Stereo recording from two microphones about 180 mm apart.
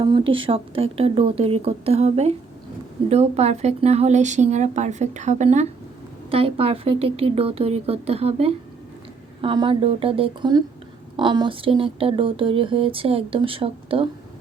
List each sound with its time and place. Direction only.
0.0 s a woman's voice: 30° right (ahead or behind)